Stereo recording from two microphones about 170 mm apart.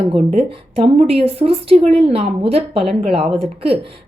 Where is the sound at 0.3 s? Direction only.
40° right (ahead or behind).